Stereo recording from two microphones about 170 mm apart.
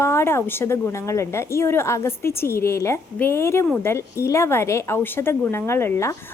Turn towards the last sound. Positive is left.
turn(degrees=15)  # may be behind; listen again after turning